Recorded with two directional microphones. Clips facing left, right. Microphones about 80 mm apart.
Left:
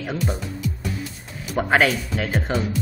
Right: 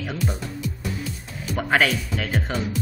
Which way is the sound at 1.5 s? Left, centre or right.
Centre.